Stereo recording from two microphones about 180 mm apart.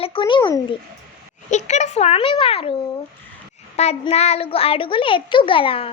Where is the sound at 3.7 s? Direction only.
35° left (ahead or behind).